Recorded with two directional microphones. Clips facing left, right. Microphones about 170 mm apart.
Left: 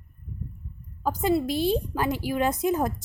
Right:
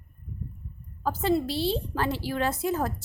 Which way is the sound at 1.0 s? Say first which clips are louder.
Left 1 dB; 15° left (ahead or behind).